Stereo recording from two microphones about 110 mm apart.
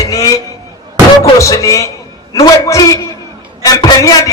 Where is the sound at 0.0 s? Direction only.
30° left (ahead or behind).